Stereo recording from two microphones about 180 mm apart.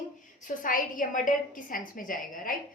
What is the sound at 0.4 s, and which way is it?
A woman's voice, 50° left (ahead or behind).